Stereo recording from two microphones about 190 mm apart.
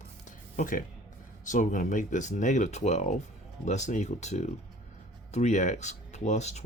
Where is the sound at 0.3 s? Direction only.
45° left (ahead or behind).